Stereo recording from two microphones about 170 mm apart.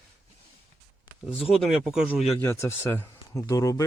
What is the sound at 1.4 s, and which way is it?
Speech, centre (ahead or behind).